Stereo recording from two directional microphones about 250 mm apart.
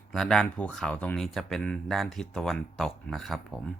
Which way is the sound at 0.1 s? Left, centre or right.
Centre.